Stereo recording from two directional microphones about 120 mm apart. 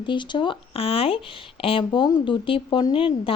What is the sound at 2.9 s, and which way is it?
Speech, 50° left (ahead or behind).